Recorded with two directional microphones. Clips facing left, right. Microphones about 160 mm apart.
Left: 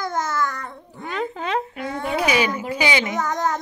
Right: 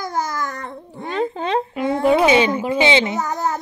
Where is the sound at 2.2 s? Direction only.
25° right (ahead or behind).